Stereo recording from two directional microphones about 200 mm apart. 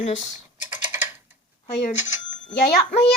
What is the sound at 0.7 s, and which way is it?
Typing, 10° right (ahead or behind).